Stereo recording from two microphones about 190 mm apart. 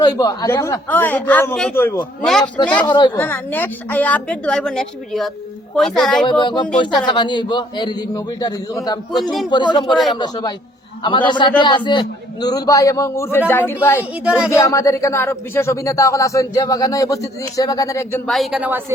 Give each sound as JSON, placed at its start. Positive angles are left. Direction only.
{"t": 0.0, "sound": "speech", "side_deg": 20}
{"t": 2.8, "sound": "a man's voice", "side_deg": 25}
{"t": 3.2, "sound": "a woman's voice", "side_deg": 10}
{"t": 6.2, "sound": "a man's voice", "side_deg": 25}
{"t": 14.3, "sound": "a woman's voice", "side_deg": -5}
{"t": 14.5, "sound": "speech", "side_deg": 15}
{"t": 18.3, "sound": "a woman's voice", "side_deg": 0}